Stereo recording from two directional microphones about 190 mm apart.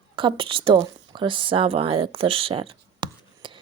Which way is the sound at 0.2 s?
25° right (ahead or behind).